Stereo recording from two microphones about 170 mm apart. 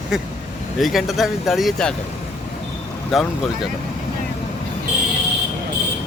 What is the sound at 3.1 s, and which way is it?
Speech, centre (ahead or behind).